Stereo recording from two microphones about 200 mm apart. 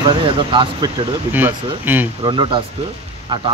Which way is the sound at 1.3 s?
10° right (ahead or behind).